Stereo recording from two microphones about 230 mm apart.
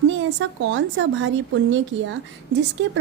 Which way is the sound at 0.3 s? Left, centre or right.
Right.